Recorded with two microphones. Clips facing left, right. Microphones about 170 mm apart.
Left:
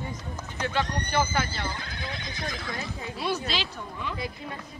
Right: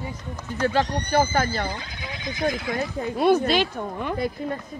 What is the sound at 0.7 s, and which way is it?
Speech, 40° right (ahead or behind).